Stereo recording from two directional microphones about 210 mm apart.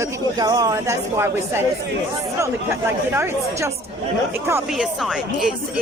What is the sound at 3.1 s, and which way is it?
Speech, 10° right (ahead or behind).